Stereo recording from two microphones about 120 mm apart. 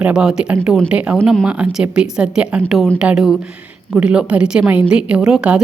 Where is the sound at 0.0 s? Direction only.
5° right (ahead or behind).